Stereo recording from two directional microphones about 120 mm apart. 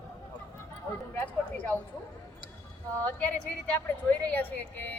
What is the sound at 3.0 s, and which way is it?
A woman's voice, 10° left (ahead or behind).